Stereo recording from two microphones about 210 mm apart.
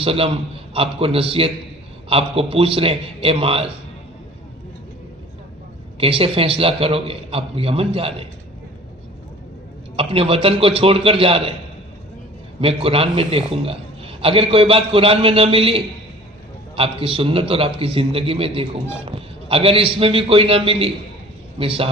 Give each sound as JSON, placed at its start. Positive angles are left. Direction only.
{"t": 0.0, "sound": "a man's voice", "side_deg": -25}
{"t": 6.0, "sound": "a man's voice", "side_deg": -25}
{"t": 9.9, "sound": "a man's voice", "side_deg": -25}
{"t": 12.5, "sound": "a man's voice", "side_deg": -25}